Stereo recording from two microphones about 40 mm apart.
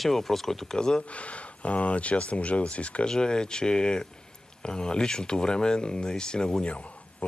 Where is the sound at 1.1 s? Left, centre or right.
Left.